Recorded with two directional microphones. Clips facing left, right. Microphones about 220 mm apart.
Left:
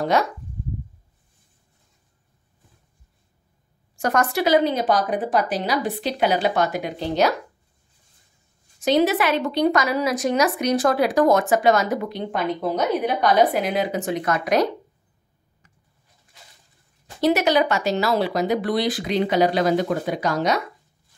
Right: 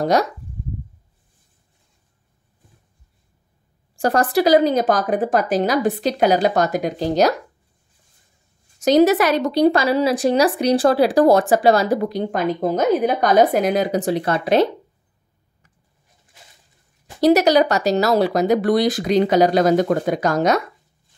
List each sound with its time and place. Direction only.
0.0 s a woman's voice: 40° right (ahead or behind)
4.0 s a woman's voice: 35° right (ahead or behind)
8.8 s a woman's voice: 40° right (ahead or behind)
17.2 s speech: 40° right (ahead or behind)